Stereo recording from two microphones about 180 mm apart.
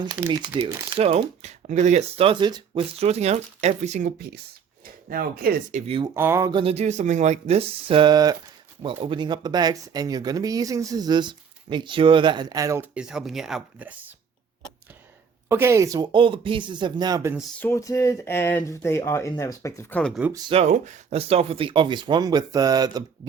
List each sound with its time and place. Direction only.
0.3 s speech: 30° right (ahead or behind)
3.0 s speech: 35° right (ahead or behind)
5.0 s speech: 55° right (ahead or behind)
5.7 s speech: 30° right (ahead or behind)
6.1 s speech: 15° right (ahead or behind)
15.4 s speech: 15° right (ahead or behind)
17.6 s speech: 15° left (ahead or behind)
20.0 s speech: 5° left (ahead or behind)
20.5 s speech: 35° right (ahead or behind); by 23.0 s 20° right (ahead or behind)